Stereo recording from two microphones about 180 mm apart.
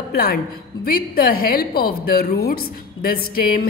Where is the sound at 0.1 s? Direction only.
55° left (ahead or behind).